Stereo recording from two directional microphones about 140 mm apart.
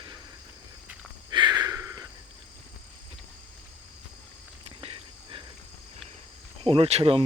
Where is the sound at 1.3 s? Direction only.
35° right (ahead or behind).